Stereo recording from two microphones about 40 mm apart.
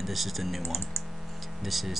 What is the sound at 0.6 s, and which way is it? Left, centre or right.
Speech, left.